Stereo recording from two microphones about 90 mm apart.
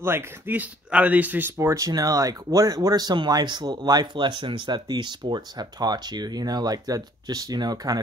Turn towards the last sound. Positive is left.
turn(degrees=-45)  # may be behind; listen again after turning